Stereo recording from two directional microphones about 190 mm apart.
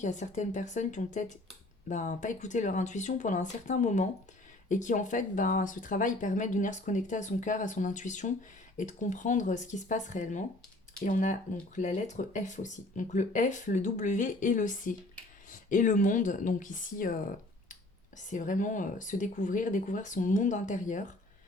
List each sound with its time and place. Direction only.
0.0 s speech: 40° left (ahead or behind)
18.3 s speech: 45° left (ahead or behind)